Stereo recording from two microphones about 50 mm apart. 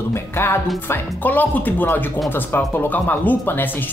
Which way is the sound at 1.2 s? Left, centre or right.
Left.